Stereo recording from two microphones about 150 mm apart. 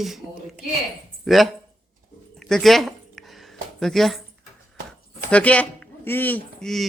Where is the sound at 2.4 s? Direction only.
Centre (ahead or behind).